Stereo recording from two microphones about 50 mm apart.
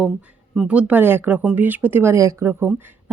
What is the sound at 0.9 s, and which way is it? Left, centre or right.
Speech, right.